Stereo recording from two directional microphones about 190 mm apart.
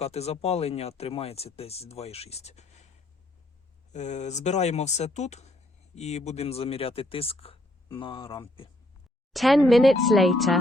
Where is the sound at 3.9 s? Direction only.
40° left (ahead or behind).